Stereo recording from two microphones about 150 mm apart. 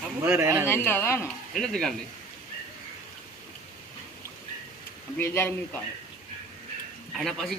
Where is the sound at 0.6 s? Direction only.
15° left (ahead or behind).